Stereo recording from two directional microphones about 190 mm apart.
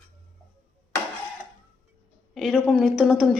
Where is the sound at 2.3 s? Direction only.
Centre (ahead or behind).